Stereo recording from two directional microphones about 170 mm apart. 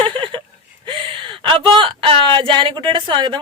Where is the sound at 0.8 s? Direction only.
30° right (ahead or behind).